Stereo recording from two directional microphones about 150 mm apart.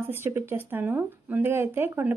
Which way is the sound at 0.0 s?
15° right (ahead or behind).